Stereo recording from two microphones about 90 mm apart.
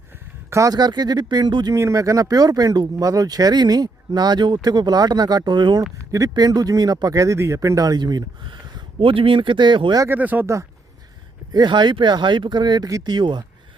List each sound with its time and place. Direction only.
0.5 s speech: 35° right (ahead or behind)
0.8 s speech: 50° right (ahead or behind)
1.7 s speech: 35° right (ahead or behind); by 5.8 s 55° right (ahead or behind)
6.1 s speech: 40° right (ahead or behind)
9.0 s speech: 75° right (ahead or behind)
10.1 s speech: 20° right (ahead or behind)
10.4 s speech: 35° right (ahead or behind)
11.5 s speech: 55° right (ahead or behind)